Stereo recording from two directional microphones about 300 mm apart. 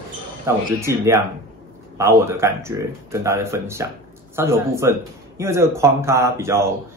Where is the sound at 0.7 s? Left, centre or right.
Centre.